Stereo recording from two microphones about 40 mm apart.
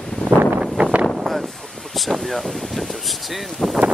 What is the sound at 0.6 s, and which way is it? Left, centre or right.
Vehicle, right.